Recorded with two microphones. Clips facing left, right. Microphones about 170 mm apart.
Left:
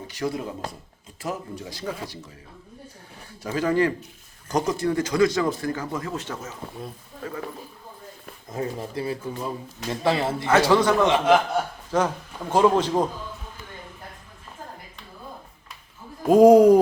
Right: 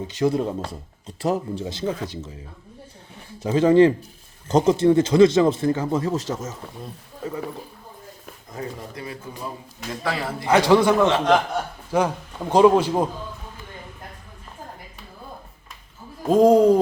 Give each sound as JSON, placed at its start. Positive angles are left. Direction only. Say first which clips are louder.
{"t": 0.1, "sound": "speech", "louder": "right 7 dB", "side_deg": -20}
{"t": 3.4, "sound": "speech", "louder": "right 7 dB", "side_deg": -25}
{"t": 8.5, "sound": "speech", "louder": "left 4 dB", "side_deg": 30}
{"t": 10.4, "sound": "a man's voice", "louder": "right 3 dB", "side_deg": -15}
{"t": 11.0, "sound": "speech", "louder": "right 1 dB", "side_deg": 15}
{"t": 11.9, "sound": "a man's voice", "louder": "right 4 dB", "side_deg": -10}
{"t": 16.2, "sound": "speech", "louder": "left 2 dB", "side_deg": 10}